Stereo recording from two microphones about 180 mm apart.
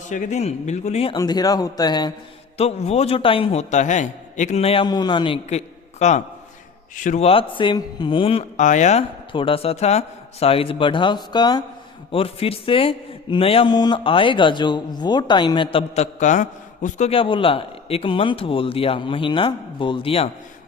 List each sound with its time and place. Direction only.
0.1 s a man's voice: 45° left (ahead or behind)
1.1 s a man's voice: 20° left (ahead or behind)
2.6 s a man's voice: 35° left (ahead or behind)